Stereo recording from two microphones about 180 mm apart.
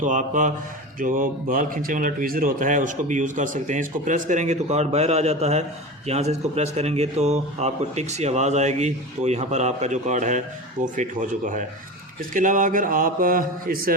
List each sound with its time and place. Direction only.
0.0 s speech: 45° right (ahead or behind)